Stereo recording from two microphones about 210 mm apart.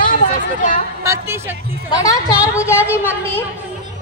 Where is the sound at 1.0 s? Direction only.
15° right (ahead or behind).